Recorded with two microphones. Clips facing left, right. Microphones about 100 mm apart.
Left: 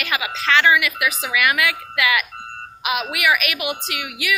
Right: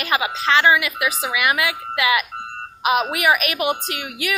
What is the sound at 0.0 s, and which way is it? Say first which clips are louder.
A woman's voice: right 3 dB; 30° right (ahead or behind).